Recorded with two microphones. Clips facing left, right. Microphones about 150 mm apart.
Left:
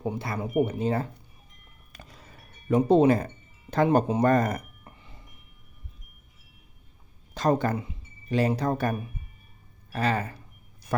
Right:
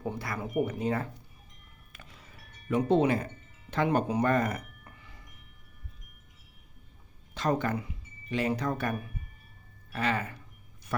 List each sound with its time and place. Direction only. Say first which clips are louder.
0.0 s speech: left 4 dB; 25° left (ahead or behind)
1.9 s music: left 4 dB; 40° left (ahead or behind)
3.7 s speech: left 5 dB; 40° left (ahead or behind)
4.1 s a sound: left 4 dB; 40° left (ahead or behind)
7.3 s speech: left 4 dB; 40° left (ahead or behind)